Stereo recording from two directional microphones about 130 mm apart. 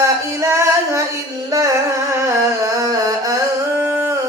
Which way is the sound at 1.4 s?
25° right (ahead or behind).